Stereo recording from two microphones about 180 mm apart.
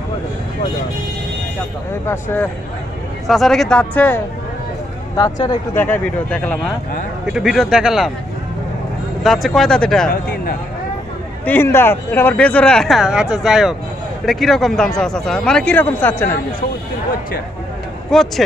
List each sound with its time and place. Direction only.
2.0 s speech: 15° left (ahead or behind)
3.3 s speech: centre (ahead or behind)
5.1 s speech: 25° left (ahead or behind)
5.8 s speech: 10° left (ahead or behind)
9.2 s speech: centre (ahead or behind)
11.4 s speech: 10° left (ahead or behind)
18.1 s speech: centre (ahead or behind)